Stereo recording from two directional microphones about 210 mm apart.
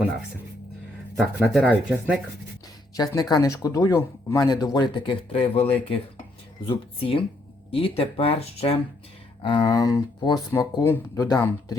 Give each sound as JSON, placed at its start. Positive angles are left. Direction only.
{"t": 1.1, "sound": "speech", "side_deg": -5}
{"t": 2.9, "sound": "speech", "side_deg": 20}
{"t": 6.7, "sound": "speech", "side_deg": 25}